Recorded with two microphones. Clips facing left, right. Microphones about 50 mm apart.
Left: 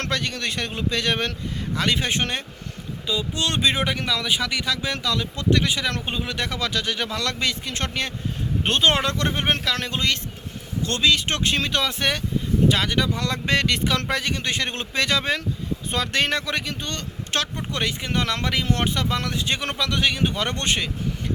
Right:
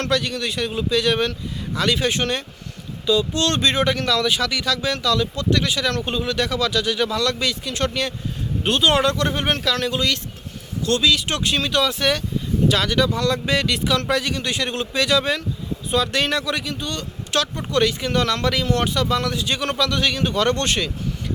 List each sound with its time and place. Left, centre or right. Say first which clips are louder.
0.0 s speech: right 4 dB; left
3.1 s speech: right 6 dB; centre; by 17.5 s left
17.7 s speech: right 6 dB; left